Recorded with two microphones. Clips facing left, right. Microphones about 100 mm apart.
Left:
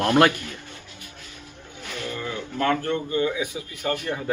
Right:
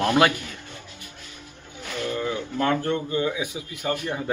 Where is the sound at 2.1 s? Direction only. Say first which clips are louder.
Right 1 dB; 20° right (ahead or behind).